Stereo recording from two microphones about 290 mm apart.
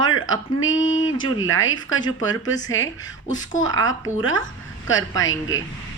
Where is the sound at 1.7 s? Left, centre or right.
Centre.